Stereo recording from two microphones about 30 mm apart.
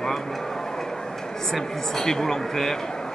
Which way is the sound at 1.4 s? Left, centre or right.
Centre.